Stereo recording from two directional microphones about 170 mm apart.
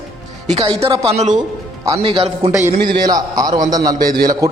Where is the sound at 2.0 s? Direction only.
30° right (ahead or behind).